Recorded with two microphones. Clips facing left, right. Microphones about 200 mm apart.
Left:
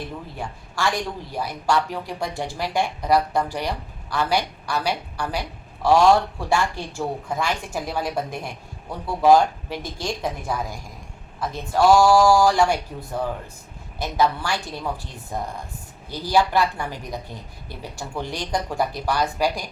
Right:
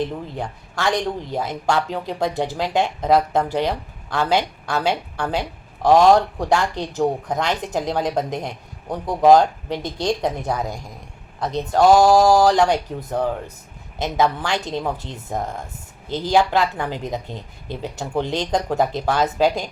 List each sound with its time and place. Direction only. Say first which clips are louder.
0.0 s speech: right 7 dB; 20° right (ahead or behind)
11.4 s speech: right 3 dB; 20° right (ahead or behind)